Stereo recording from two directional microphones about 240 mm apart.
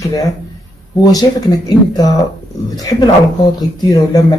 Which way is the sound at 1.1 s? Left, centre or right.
Centre.